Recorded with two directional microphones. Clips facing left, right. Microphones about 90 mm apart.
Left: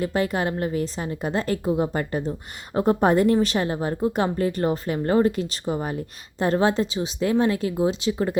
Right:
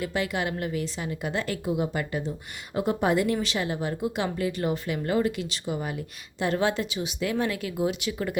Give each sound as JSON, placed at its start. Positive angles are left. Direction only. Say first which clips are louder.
{"t": 0.0, "sound": "a woman's voice", "louder": "left 5 dB", "side_deg": 40}